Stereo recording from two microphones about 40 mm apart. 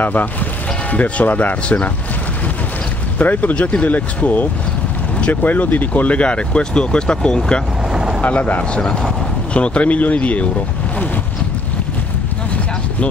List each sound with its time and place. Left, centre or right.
0.0 s speech: left
0.9 s speech: left
3.2 s speech: left
6.1 s speech: left
8.2 s speech: left